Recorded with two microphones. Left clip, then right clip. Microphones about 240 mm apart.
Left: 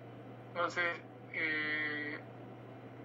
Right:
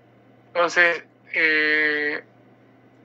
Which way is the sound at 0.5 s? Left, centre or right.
Right.